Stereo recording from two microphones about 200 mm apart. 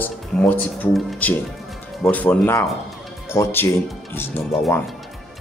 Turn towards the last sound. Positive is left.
turn(degrees=0)  # may be behind; listen again after turning